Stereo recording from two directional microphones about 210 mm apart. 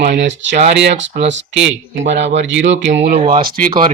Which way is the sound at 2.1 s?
60° right (ahead or behind).